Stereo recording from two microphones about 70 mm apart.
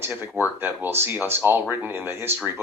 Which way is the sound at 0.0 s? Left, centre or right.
Right.